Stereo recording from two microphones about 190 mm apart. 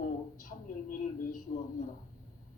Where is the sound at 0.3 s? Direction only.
45° left (ahead or behind).